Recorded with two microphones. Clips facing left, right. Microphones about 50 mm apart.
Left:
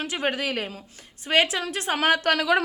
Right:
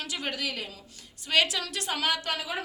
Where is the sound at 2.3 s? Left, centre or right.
Left.